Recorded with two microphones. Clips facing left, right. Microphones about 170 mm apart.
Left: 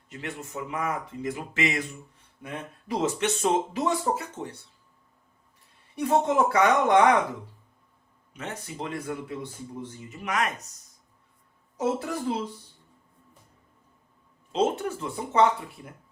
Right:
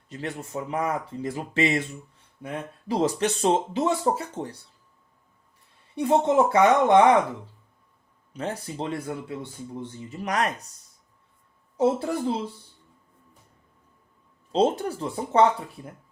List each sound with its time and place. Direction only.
0.1 s speech: 35° right (ahead or behind)
6.0 s speech: 25° right (ahead or behind)
8.3 s speech: 35° right (ahead or behind)
11.8 s speech: 30° right (ahead or behind)
14.5 s speech: 35° right (ahead or behind)